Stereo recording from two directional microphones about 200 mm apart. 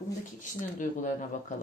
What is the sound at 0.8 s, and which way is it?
Speech, 40° left (ahead or behind).